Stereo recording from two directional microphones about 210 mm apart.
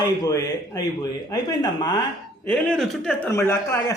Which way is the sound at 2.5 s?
5° left (ahead or behind).